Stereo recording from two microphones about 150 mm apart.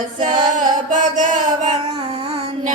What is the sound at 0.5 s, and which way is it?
Music, 60° right (ahead or behind).